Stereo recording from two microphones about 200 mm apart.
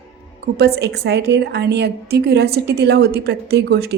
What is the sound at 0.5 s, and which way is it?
A woman's voice, 55° right (ahead or behind).